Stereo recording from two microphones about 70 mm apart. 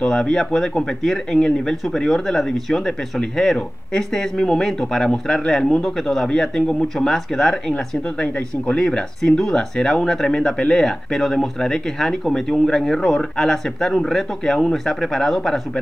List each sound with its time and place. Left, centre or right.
0.0 s speech: centre